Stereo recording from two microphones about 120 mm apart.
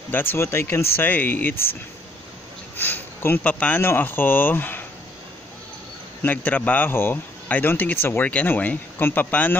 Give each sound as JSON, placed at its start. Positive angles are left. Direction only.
{"t": 0.1, "sound": "speech", "side_deg": 15}
{"t": 2.8, "sound": "speech", "side_deg": 20}
{"t": 6.2, "sound": "speech", "side_deg": 15}